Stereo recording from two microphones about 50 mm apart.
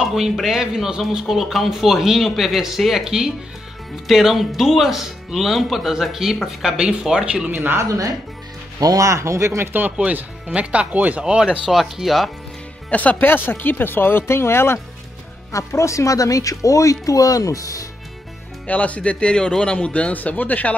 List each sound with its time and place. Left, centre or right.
0.0 s speech: centre
6.8 s speech: centre
7.5 s speech: right
9.0 s speech: right
9.6 s speech: right
10.5 s speech: right
11.7 s speech: centre
12.9 s speech: left
14.2 s speech: left
15.5 s speech: left
18.7 s a man's voice: left